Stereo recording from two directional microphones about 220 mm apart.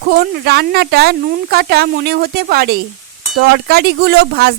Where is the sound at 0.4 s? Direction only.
45° right (ahead or behind).